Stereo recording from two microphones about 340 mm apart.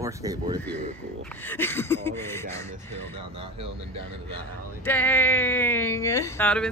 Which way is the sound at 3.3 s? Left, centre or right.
Centre.